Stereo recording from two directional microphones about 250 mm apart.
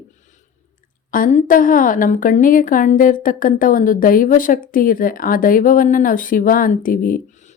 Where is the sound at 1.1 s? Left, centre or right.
Left.